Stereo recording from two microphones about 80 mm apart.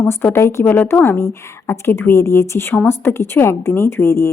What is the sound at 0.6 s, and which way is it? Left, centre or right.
Speech, left.